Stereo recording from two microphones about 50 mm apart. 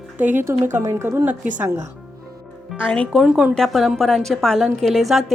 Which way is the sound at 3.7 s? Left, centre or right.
Centre.